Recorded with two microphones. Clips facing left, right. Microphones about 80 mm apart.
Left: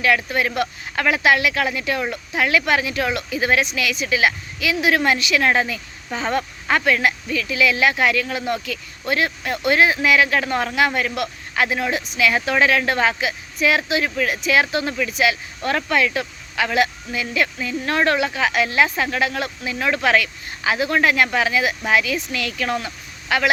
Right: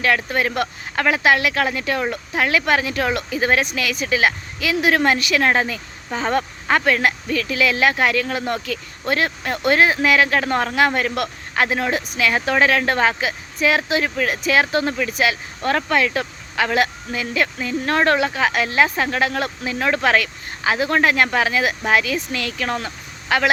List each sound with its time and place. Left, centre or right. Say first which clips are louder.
0.0 s speech: even; right